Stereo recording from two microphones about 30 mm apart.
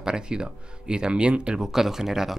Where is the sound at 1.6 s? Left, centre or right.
Centre.